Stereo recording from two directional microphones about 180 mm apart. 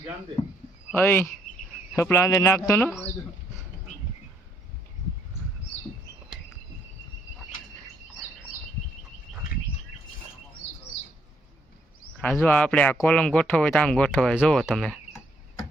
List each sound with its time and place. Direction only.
0.9 s speech: 10° left (ahead or behind)
10.6 s bird: 15° right (ahead or behind)
12.2 s speech: 10° left (ahead or behind)